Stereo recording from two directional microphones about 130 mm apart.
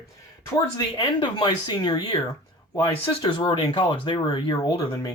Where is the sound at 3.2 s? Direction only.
35° left (ahead or behind).